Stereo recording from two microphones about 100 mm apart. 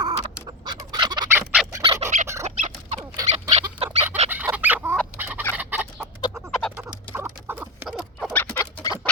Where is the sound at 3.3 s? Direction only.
90° right.